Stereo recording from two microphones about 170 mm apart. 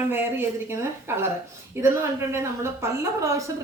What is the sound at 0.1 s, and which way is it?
A woman's voice, 15° right (ahead or behind).